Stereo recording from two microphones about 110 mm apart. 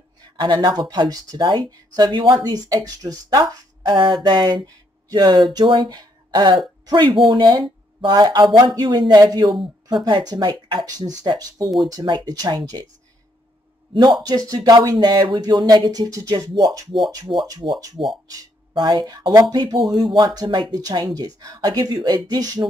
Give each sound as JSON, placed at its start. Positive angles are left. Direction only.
{"t": 0.4, "sound": "speech", "side_deg": -45}
{"t": 9.5, "sound": "speech", "side_deg": -50}
{"t": 14.2, "sound": "speech", "side_deg": -35}